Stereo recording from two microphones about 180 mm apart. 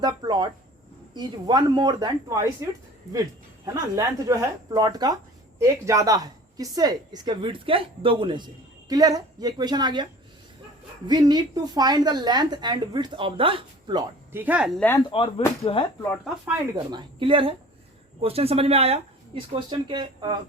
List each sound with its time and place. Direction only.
0.0 s speech: 20° right (ahead or behind)
3.8 s speech: 15° right (ahead or behind)
14.3 s speech: 10° right (ahead or behind)
14.8 s speech: 10° left (ahead or behind)
15.1 s speech: 30° left (ahead or behind)
16.7 s speech: 25° right (ahead or behind)